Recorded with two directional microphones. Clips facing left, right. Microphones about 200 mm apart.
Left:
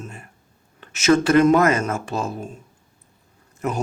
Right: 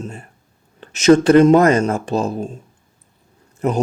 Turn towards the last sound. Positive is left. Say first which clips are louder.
# right 6 dB
turn(degrees=-35)  # may be behind; listen again after turning